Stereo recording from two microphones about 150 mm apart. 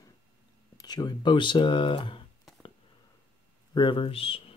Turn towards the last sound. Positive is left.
turn(degrees=40)  # may be behind; listen again after turning